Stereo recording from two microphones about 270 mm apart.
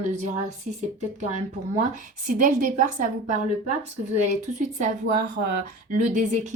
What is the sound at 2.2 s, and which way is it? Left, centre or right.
A woman's voice, right.